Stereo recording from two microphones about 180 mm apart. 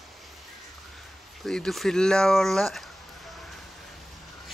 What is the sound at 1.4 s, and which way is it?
Speech, centre (ahead or behind).